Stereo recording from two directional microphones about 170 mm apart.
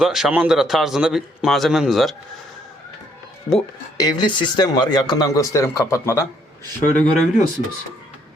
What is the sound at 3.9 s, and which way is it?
Speech, 25° left (ahead or behind).